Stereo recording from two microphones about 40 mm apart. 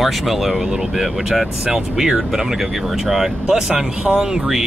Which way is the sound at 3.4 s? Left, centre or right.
Centre.